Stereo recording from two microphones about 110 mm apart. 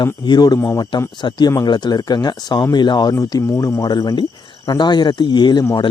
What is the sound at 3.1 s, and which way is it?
Speech, 30° left (ahead or behind).